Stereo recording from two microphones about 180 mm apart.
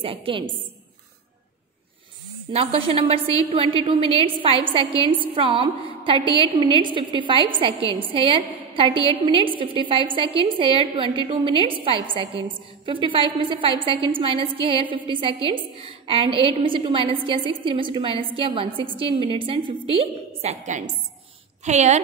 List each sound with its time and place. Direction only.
0.0 s a woman's voice: 30° right (ahead or behind)
2.5 s a woman's voice: 35° right (ahead or behind)